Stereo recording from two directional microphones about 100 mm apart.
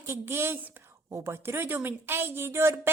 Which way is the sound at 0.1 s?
25° right (ahead or behind).